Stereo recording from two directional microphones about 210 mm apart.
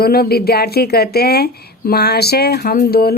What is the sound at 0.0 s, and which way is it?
A woman's voice, 50° left (ahead or behind).